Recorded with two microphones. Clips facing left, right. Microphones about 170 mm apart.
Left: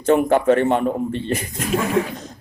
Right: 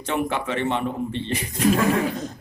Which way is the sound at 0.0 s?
45° left (ahead or behind).